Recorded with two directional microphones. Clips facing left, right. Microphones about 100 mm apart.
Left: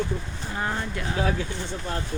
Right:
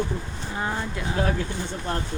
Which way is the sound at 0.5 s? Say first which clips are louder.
Even; 5° right (ahead or behind).